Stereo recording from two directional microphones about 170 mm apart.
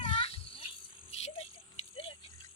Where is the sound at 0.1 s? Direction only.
30° left (ahead or behind).